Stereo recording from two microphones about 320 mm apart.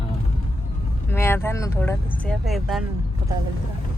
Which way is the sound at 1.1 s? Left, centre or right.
Centre.